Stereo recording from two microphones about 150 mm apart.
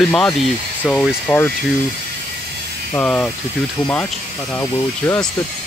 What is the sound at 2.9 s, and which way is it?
Speech, 10° left (ahead or behind).